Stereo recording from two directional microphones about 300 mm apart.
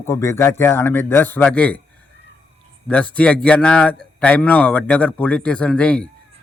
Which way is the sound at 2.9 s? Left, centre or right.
Centre.